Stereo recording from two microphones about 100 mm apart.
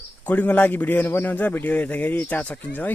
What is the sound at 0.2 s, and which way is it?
A man's voice, 15° left (ahead or behind).